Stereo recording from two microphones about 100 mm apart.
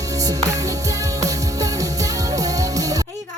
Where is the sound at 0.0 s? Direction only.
35° right (ahead or behind).